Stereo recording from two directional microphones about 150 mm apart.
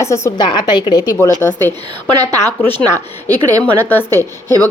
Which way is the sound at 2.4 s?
15° left (ahead or behind).